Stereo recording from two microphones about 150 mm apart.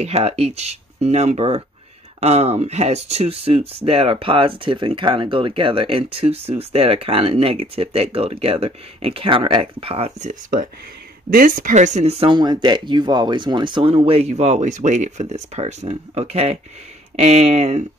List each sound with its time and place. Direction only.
0.0 s speech: 45° right (ahead or behind)
11.2 s speech: 70° right (ahead or behind); by 12.4 s 40° right (ahead or behind)
12.4 s speech: 30° right (ahead or behind); by 17.8 s 45° right (ahead or behind)